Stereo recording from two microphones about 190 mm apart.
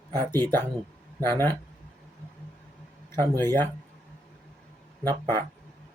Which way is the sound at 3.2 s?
15° left (ahead or behind).